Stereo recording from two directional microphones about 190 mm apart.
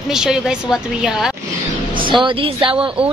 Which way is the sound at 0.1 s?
5° right (ahead or behind).